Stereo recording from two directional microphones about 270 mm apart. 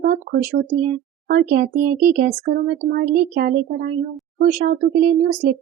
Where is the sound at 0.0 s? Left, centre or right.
Right.